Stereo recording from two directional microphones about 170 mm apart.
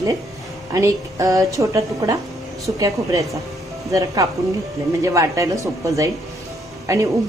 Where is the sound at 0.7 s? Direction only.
20° right (ahead or behind).